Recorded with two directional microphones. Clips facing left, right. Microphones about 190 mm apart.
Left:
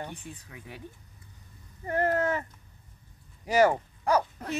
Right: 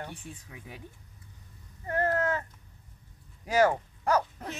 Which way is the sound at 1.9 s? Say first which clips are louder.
Left 2 dB; 10° left (ahead or behind).